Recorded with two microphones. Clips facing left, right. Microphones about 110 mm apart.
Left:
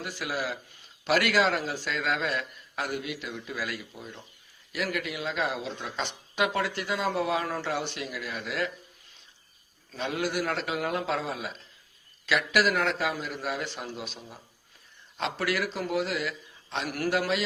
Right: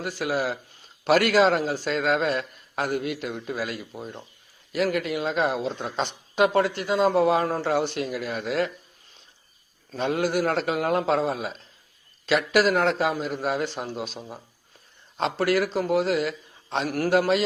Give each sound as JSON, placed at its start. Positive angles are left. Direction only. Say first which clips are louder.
{"t": 0.0, "sound": "a woman's voice", "louder": "right 6 dB", "side_deg": -40}
{"t": 9.9, "sound": "a woman's voice", "louder": "right 6 dB", "side_deg": -40}